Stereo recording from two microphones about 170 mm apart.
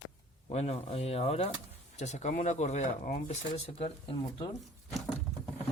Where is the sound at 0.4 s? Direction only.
40° left (ahead or behind).